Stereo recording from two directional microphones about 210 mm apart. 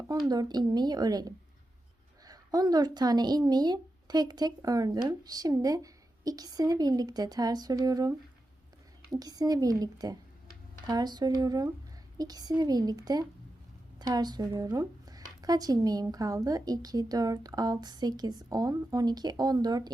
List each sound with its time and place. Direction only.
0.3 s a woman's voice: 20° right (ahead or behind)